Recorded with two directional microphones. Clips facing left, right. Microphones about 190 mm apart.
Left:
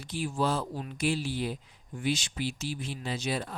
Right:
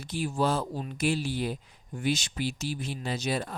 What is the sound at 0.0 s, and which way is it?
Speech, 45° right (ahead or behind).